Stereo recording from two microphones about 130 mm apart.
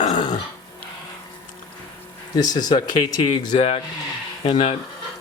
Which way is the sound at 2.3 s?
30° left (ahead or behind).